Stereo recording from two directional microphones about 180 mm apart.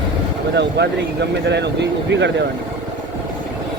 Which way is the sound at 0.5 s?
70° right (ahead or behind).